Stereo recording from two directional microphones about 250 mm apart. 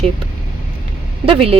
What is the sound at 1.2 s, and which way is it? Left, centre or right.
Speech, right.